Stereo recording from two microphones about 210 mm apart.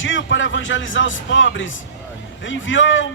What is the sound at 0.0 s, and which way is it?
A man's voice, 65° left (ahead or behind).